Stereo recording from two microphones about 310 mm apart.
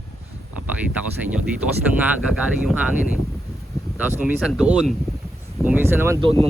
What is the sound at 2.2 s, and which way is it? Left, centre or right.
Speech, centre.